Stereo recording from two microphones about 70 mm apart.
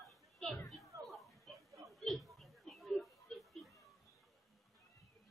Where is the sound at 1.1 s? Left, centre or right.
Centre.